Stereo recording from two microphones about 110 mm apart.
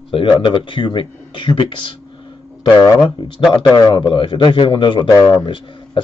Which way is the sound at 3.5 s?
40° left (ahead or behind).